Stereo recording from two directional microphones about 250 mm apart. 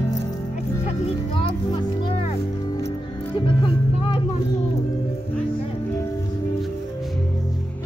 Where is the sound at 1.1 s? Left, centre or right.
Centre.